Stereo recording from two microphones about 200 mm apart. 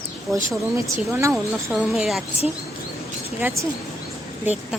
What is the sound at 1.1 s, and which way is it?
Speech, 15° right (ahead or behind).